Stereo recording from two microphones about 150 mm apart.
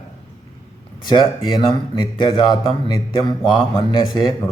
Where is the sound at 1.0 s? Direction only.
30° left (ahead or behind).